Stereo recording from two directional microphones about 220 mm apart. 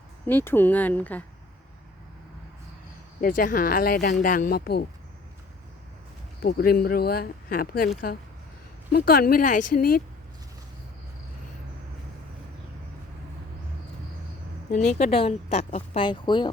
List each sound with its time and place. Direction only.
0.3 s speech: 10° left (ahead or behind)
3.2 s speech: 40° left (ahead or behind)
6.4 s speech: 45° left (ahead or behind)
14.7 s speech: 35° left (ahead or behind)